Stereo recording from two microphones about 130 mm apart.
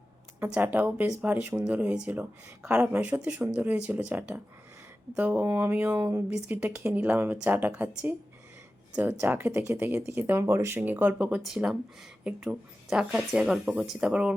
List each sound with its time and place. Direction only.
0.3 s speech: 15° right (ahead or behind)